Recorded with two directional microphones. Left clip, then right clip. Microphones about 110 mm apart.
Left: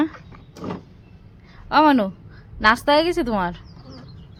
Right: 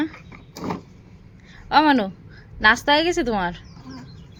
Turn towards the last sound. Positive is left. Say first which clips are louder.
# even
turn(degrees=25)  # may be behind; listen again after turning